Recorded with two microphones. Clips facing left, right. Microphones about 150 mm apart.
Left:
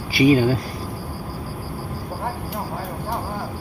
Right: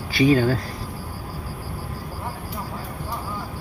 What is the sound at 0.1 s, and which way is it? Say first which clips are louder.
Speech: left 2 dB; 10° left (ahead or behind).